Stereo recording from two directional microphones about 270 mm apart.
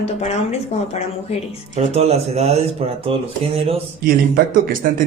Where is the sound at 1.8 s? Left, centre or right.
Right.